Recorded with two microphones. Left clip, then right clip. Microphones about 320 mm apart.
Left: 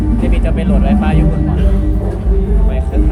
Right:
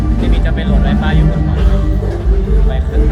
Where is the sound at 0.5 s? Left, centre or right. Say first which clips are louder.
Left 2 dB; left.